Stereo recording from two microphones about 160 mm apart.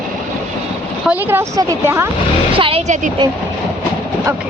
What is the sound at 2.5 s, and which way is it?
Speech, 35° right (ahead or behind).